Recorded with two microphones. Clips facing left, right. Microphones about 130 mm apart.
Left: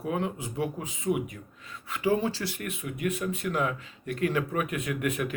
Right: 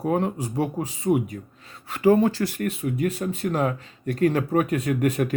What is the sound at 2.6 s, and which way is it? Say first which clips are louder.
Speech: right 4 dB; 30° right (ahead or behind).